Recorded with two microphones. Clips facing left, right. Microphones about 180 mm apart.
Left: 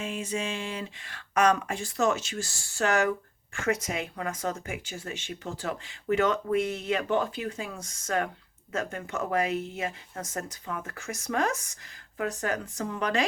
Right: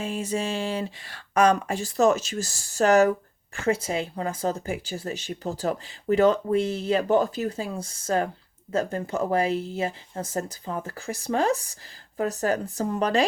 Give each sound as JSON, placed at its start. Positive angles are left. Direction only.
{"t": 0.0, "sound": "speech", "side_deg": -35}